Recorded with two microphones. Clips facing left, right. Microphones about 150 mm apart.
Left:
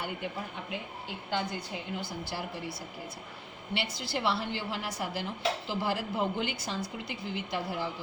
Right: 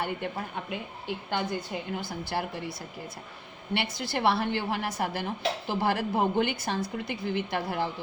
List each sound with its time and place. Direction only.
1.3 s a woman's voice: 55° right (ahead or behind)
3.8 s speech: 50° right (ahead or behind)